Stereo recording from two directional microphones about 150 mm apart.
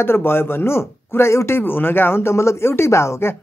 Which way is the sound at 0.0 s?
15° left (ahead or behind).